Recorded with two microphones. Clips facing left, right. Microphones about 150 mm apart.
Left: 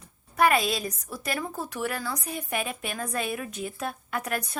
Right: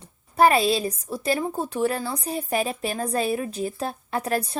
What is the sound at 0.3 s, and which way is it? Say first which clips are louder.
A woman's voice: right 5 dB; 30° right (ahead or behind).